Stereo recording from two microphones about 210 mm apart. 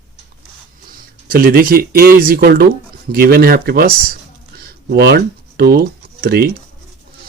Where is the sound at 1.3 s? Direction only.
45° right (ahead or behind).